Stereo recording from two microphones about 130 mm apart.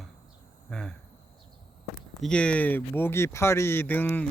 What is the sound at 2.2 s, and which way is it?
Speech, 10° left (ahead or behind).